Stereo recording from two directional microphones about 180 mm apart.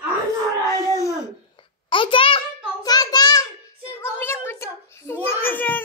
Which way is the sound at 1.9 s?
30° left (ahead or behind).